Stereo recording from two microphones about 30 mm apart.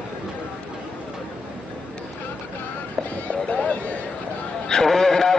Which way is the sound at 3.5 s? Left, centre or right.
Left.